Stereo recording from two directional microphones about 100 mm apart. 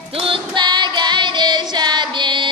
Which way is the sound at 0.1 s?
65° right (ahead or behind).